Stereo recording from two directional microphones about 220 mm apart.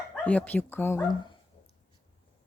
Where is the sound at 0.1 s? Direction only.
5° left (ahead or behind).